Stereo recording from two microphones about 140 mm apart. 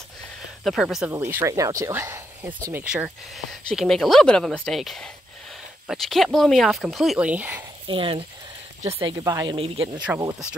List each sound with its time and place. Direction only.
0.7 s speech: centre (ahead or behind)
1.1 s speech: 20° right (ahead or behind)
3.6 s speech: 5° left (ahead or behind)
7.9 s speech: 40° right (ahead or behind)
9.1 s speech: 25° right (ahead or behind)
9.6 s speech: 35° right (ahead or behind)